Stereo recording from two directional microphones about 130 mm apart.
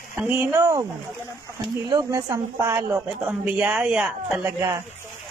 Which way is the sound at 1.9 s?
25° right (ahead or behind).